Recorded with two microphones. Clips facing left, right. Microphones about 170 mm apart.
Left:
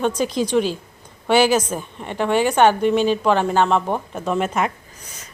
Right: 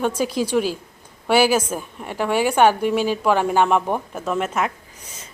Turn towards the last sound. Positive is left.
turn(degrees=0)  # may be behind; listen again after turning